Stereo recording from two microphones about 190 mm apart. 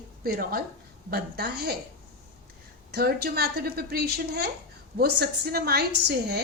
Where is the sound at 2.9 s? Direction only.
55° right (ahead or behind).